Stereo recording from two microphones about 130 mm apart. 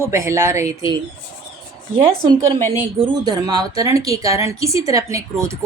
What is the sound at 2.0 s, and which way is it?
Speech, 45° right (ahead or behind).